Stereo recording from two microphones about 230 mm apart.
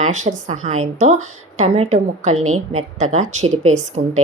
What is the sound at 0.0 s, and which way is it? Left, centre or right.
A woman's voice, right.